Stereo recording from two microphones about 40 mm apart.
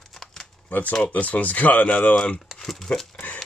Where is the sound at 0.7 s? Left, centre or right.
Left.